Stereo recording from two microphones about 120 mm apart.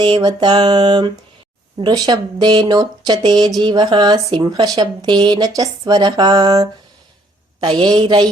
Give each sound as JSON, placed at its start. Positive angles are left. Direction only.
{"t": 0.0, "sound": "speech", "side_deg": -35}
{"t": 7.7, "sound": "speech", "side_deg": -45}